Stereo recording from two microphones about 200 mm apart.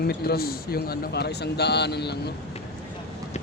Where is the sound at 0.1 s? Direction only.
50° left (ahead or behind).